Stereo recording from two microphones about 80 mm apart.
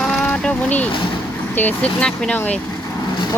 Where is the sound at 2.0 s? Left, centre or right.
Centre.